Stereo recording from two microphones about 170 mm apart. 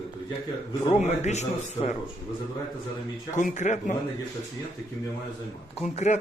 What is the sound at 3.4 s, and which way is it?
Speech, 45° left (ahead or behind).